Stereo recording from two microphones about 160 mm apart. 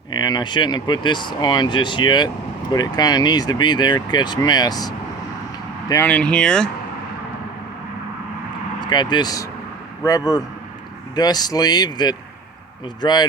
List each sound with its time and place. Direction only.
0.1 s speech: 25° left (ahead or behind)
6.1 s speech: 5° left (ahead or behind)
8.8 s speech: 30° left (ahead or behind)